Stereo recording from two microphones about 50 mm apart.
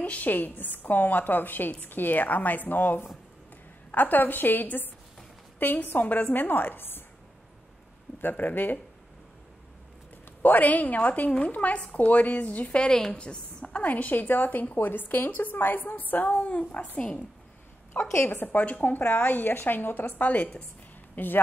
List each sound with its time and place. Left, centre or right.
0.0 s a woman's voice: left
8.2 s a woman's voice: left
10.4 s a woman's voice: left
17.9 s a woman's voice: left
21.1 s a sound: left